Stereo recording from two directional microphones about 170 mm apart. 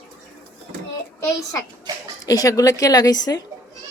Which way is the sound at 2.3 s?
20° left (ahead or behind).